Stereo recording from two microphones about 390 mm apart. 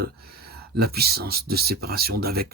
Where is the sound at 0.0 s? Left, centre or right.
Right.